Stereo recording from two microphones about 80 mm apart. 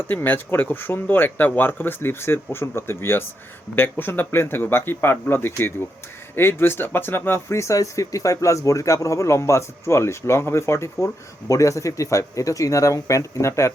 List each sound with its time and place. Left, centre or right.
0.1 s speech: left